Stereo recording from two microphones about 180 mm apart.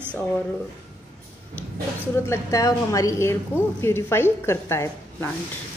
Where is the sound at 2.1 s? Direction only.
15° left (ahead or behind).